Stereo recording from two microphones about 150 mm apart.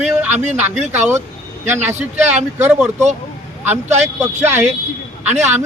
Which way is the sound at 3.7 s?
50° right (ahead or behind).